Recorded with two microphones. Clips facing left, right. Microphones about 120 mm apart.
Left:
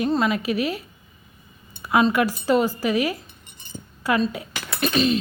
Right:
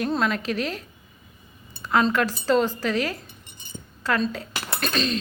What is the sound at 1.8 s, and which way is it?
A woman's voice, 10° left (ahead or behind).